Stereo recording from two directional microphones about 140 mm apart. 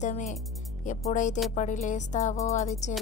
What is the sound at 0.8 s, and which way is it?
Speech, 60° left (ahead or behind).